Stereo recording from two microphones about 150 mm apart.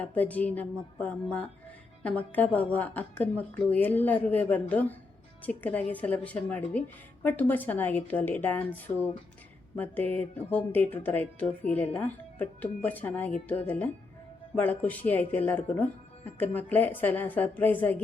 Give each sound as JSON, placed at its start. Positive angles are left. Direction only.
{"t": 0.0, "sound": "speech", "side_deg": 10}